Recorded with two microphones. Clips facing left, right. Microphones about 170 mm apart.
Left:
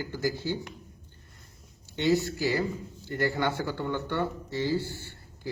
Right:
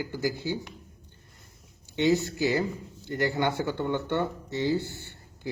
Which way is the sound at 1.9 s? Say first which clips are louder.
Right 1 dB; 20° right (ahead or behind).